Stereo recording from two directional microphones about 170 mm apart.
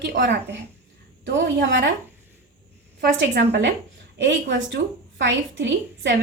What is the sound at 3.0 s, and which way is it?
A woman's voice, 90° right.